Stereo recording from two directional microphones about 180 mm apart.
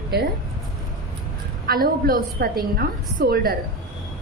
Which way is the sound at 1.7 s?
55° right (ahead or behind).